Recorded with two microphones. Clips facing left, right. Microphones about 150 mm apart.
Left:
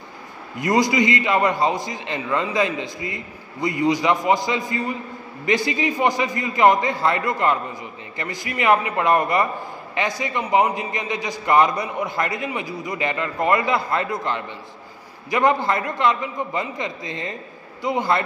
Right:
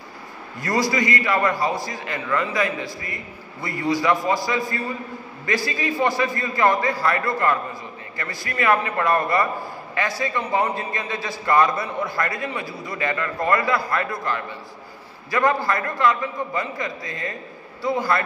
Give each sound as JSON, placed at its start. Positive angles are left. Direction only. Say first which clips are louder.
{"t": 0.6, "sound": "a man's voice", "louder": "left 4 dB", "side_deg": 20}